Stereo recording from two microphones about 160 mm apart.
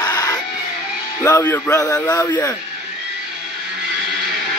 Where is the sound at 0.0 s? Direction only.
25° left (ahead or behind).